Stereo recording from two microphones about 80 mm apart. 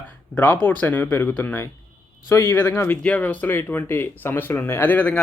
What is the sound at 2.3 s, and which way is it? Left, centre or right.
Speech, left.